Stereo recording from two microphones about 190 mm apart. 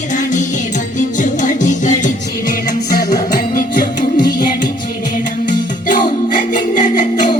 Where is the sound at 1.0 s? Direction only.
40° left (ahead or behind).